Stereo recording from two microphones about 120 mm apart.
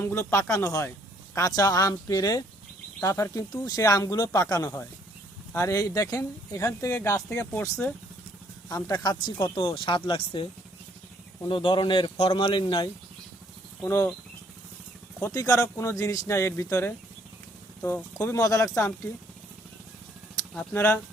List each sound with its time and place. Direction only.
0.0 s speech: 20° left (ahead or behind)
8.7 s speech: 35° left (ahead or behind)
13.8 s speech: 20° left (ahead or behind)
15.2 s speech: 30° left (ahead or behind)
20.7 s speech: 15° left (ahead or behind)